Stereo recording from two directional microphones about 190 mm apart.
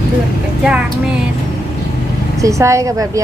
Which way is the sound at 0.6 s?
5° right (ahead or behind).